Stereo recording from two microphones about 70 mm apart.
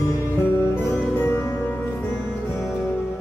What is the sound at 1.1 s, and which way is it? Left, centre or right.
Music, left.